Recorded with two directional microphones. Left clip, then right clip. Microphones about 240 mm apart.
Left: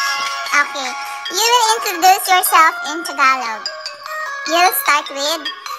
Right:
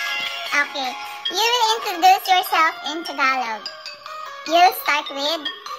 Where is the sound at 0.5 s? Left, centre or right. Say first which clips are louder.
Left 4 dB; centre.